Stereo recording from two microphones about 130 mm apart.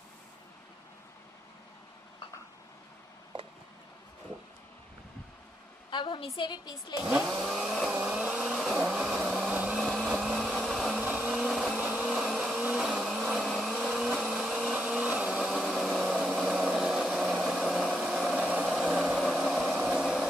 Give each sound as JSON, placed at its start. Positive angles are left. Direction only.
{"t": 3.3, "sound": "a sound", "side_deg": -40}
{"t": 5.9, "sound": "a woman's voice", "side_deg": 35}
{"t": 7.1, "sound": "chainsaw", "side_deg": -5}
{"t": 7.9, "sound": "a sound", "side_deg": -10}
{"t": 9.8, "sound": "vehicle", "side_deg": 0}
{"t": 11.0, "sound": "blender", "side_deg": -10}
{"t": 11.8, "sound": "vehicle", "side_deg": -10}